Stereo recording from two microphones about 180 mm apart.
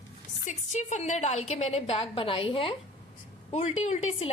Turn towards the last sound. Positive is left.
turn(degrees=40)  # may be behind; listen again after turning